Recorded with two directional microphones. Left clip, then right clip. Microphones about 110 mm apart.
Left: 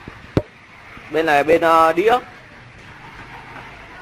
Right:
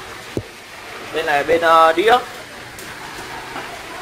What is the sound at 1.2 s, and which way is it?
Speech, 25° left (ahead or behind).